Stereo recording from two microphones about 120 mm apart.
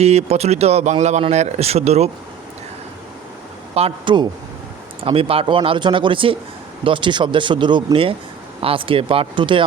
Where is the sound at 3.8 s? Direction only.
55° right (ahead or behind).